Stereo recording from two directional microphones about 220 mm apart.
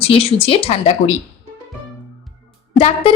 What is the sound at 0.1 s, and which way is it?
Speech, 25° left (ahead or behind).